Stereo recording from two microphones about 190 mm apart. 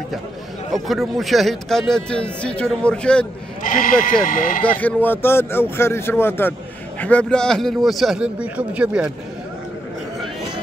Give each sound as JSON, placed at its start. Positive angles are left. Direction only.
{"t": 0.8, "sound": "speech", "side_deg": 0}
{"t": 3.6, "sound": "speech", "side_deg": 45}
{"t": 4.6, "sound": "speech", "side_deg": 10}